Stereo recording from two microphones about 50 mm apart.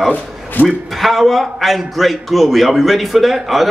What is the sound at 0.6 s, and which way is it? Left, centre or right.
Speech, left.